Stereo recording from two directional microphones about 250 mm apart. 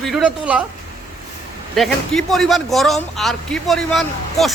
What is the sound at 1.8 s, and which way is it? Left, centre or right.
A man's voice, centre.